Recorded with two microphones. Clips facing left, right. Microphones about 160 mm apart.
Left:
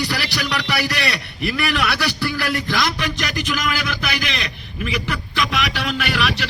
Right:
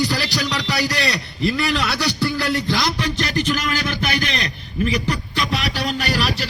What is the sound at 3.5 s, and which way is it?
A man's voice, 40° right (ahead or behind).